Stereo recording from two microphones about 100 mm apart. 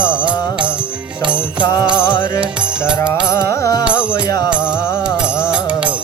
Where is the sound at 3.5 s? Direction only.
30° left (ahead or behind).